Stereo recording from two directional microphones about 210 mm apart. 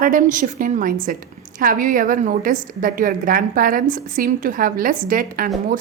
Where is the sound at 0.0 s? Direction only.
40° right (ahead or behind).